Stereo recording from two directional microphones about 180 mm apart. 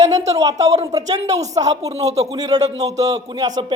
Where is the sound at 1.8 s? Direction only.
35° right (ahead or behind).